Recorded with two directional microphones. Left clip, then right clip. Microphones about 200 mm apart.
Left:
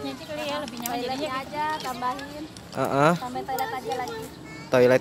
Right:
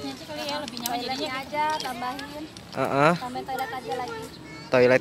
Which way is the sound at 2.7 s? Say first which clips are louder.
Even; 5° left (ahead or behind).